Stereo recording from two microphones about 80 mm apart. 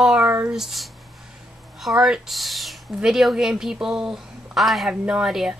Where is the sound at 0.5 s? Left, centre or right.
Centre.